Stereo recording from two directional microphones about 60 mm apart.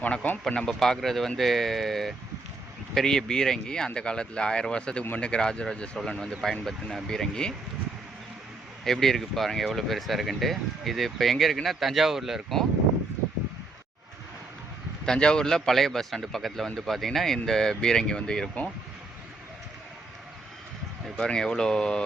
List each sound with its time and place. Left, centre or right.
0.0 s speech: left
0.4 s a man's voice: centre
8.8 s speech: centre
15.0 s a man's voice: centre
21.2 s a man's voice: centre